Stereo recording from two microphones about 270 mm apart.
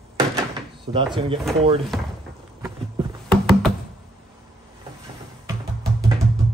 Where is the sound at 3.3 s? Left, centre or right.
Centre.